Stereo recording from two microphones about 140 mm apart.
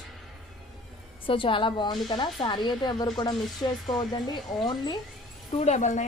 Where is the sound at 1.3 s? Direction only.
35° left (ahead or behind).